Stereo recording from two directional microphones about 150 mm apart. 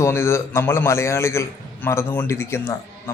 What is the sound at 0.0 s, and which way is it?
A man's voice, 15° left (ahead or behind).